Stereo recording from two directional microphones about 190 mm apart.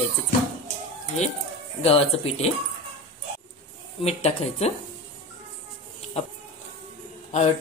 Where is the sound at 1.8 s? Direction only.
30° left (ahead or behind).